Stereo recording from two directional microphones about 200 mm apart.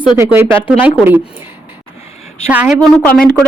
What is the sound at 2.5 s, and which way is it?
Speech, 5° right (ahead or behind).